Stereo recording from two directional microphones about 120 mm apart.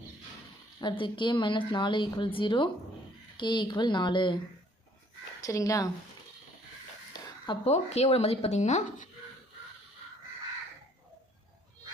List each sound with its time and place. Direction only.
0.8 s a woman's voice: 40° left (ahead or behind)
5.4 s speech: 30° left (ahead or behind)
7.1 s a sound: 40° left (ahead or behind)
7.6 s speech: 65° left (ahead or behind)